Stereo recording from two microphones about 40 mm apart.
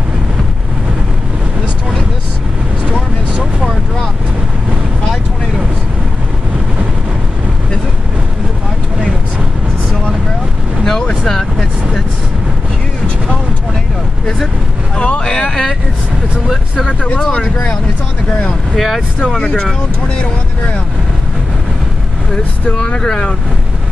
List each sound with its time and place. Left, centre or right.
10.9 s vehicle: centre
15.0 s vehicle: left
16.4 s vehicle: centre
18.8 s vehicle: centre
19.4 s vehicle: left
20.2 s vehicle: left
22.9 s boat: centre